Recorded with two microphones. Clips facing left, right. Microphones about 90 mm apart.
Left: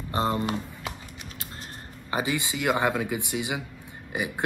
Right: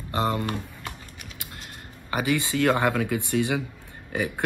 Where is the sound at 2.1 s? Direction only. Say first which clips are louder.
Right 3 dB; 20° left (ahead or behind).